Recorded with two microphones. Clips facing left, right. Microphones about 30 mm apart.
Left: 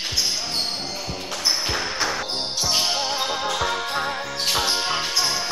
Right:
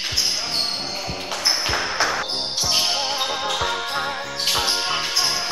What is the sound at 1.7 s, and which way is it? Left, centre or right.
Music, right.